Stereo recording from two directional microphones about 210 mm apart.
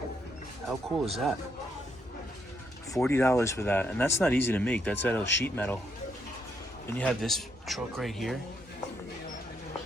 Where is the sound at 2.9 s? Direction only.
5° left (ahead or behind).